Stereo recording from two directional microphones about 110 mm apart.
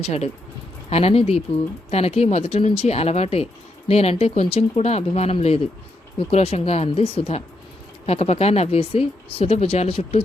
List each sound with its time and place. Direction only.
0.0 s speech: 70° left (ahead or behind)